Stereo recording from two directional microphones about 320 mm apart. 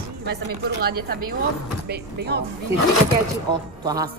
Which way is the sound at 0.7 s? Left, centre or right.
Right.